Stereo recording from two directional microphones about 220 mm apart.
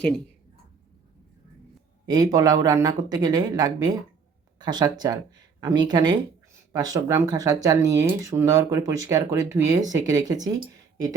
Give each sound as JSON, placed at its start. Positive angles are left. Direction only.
{"t": 2.0, "sound": "speech", "side_deg": -20}